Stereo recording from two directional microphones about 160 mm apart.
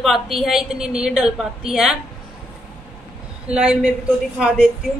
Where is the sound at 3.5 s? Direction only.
5° right (ahead or behind).